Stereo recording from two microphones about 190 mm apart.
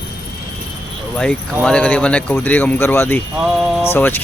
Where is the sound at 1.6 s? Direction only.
5° left (ahead or behind).